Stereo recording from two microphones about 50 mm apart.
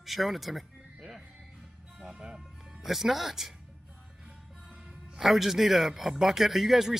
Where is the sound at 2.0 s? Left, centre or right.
Centre.